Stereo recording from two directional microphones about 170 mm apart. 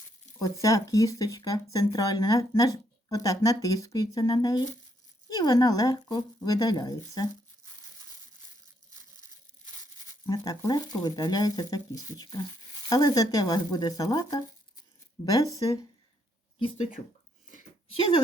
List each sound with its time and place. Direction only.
0.3 s speech: 20° left (ahead or behind)
10.2 s speech: 20° left (ahead or behind)
16.6 s speech: 30° left (ahead or behind)
17.9 s speech: 30° left (ahead or behind)